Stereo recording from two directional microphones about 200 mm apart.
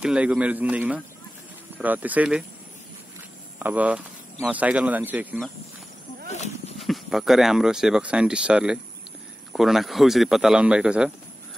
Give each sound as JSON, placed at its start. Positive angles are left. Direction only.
{"t": 0.0, "sound": "speech", "side_deg": -5}
{"t": 3.5, "sound": "speech", "side_deg": -5}
{"t": 6.3, "sound": "horse", "side_deg": 35}
{"t": 6.8, "sound": "speech", "side_deg": 0}